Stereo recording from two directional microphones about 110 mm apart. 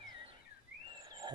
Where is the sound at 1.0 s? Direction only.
35° right (ahead or behind).